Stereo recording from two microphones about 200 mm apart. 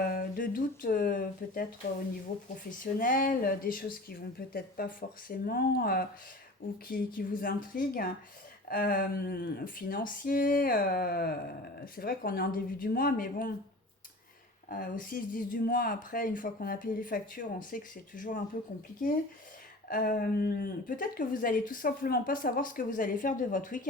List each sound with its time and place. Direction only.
0.0 s a sound: 45° left (ahead or behind)
2.6 s speech: 40° left (ahead or behind)
14.7 s speech: 45° left (ahead or behind)
19.9 s speech: 45° left (ahead or behind)